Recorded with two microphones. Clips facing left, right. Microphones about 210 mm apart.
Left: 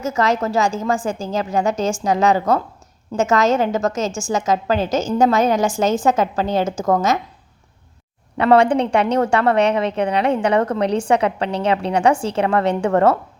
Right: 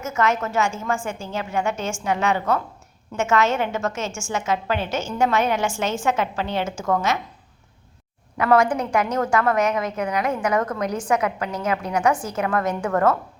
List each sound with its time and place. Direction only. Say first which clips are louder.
0.0 s a woman's voice: left 4 dB; 35° left (ahead or behind)
8.4 s a woman's voice: left 5 dB; 30° left (ahead or behind)